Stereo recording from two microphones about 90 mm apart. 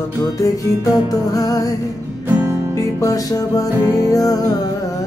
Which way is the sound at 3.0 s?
40° left (ahead or behind).